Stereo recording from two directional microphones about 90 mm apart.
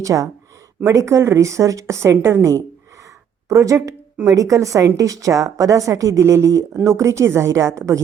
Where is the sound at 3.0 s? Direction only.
40° right (ahead or behind).